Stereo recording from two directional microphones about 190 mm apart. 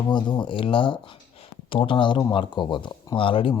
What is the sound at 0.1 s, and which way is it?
Speech, 25° left (ahead or behind).